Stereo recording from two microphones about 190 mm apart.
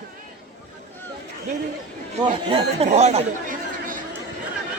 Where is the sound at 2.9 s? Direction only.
35° right (ahead or behind).